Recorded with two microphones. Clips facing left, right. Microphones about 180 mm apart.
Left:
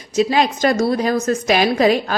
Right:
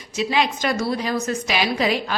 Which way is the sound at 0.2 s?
45° left (ahead or behind).